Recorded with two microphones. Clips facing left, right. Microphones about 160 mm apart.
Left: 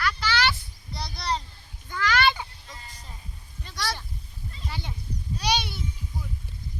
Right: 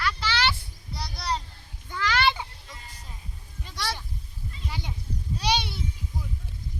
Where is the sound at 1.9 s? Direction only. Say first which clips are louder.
Left 1 dB; 25° right (ahead or behind).